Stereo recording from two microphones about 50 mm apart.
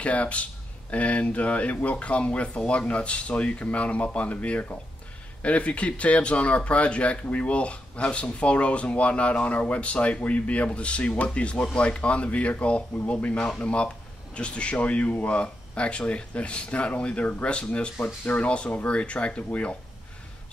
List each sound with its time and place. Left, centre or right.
0.0 s speech: left